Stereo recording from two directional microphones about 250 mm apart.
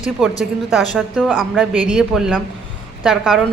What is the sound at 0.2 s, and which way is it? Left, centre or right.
Speech, centre.